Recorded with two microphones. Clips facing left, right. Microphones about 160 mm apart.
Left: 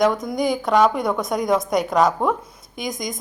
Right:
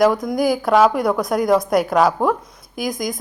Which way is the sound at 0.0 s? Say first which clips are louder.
Right 3 dB; centre (ahead or behind).